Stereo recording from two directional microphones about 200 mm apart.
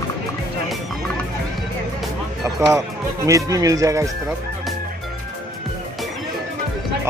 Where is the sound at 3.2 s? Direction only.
15° right (ahead or behind).